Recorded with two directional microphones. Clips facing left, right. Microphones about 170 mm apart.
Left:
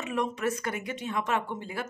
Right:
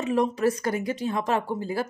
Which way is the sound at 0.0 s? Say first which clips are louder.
Right 7 dB; 35° right (ahead or behind).